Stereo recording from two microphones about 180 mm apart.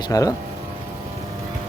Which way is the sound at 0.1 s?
20° left (ahead or behind).